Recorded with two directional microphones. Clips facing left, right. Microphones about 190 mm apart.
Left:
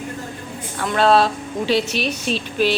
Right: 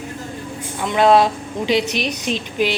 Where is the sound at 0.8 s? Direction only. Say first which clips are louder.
Right 2 dB; 15° right (ahead or behind).